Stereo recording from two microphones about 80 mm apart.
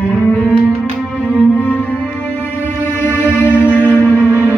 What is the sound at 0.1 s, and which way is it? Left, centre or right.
Music, centre.